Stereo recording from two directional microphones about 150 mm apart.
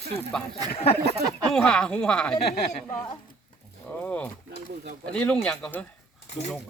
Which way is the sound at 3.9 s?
10° left (ahead or behind).